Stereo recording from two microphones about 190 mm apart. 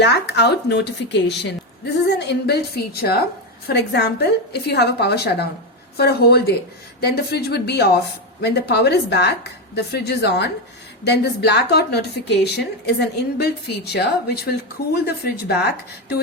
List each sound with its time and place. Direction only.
0.0 s speech: 65° left (ahead or behind)